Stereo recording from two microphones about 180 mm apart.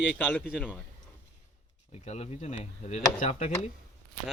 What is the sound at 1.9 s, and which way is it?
Speech, 35° left (ahead or behind).